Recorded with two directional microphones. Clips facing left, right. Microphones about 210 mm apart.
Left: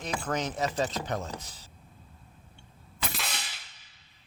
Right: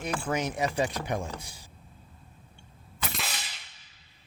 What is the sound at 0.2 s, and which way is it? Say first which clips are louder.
A man's voice: even; 10° right (ahead or behind).